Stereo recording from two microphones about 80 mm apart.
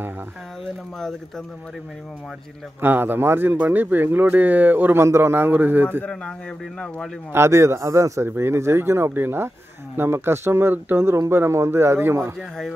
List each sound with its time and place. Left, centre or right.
2.8 s speech: right
5.0 s speech: right
7.3 s speech: right
12.4 s speech: centre